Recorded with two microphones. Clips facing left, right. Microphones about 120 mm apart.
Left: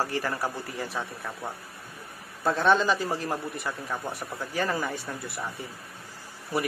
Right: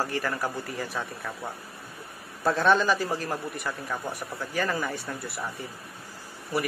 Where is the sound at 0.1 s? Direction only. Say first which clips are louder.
Even; 20° left (ahead or behind).